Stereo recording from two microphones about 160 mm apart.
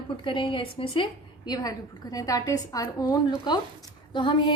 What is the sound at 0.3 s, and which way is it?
A woman's voice, 30° left (ahead or behind).